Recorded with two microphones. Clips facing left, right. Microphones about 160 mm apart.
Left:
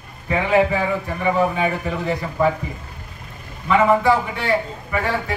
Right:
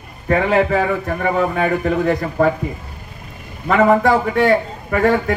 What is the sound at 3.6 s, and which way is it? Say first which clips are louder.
A man's voice: right 2 dB; 55° right (ahead or behind).